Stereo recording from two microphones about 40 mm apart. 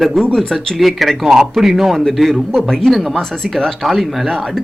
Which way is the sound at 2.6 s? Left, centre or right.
Centre.